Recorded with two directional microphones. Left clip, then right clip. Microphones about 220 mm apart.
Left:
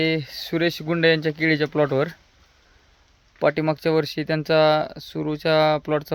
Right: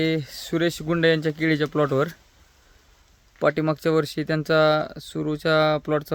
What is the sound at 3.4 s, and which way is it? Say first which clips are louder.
Speech: left 1 dB; 10° right (ahead or behind).